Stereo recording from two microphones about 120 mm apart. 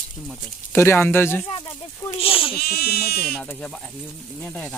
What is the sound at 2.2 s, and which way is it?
Speech, 50° left (ahead or behind).